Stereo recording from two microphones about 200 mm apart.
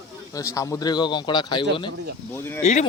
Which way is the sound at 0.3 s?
15° left (ahead or behind).